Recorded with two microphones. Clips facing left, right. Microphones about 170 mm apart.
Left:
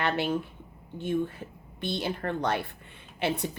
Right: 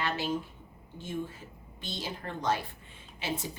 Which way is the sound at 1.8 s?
60° left (ahead or behind).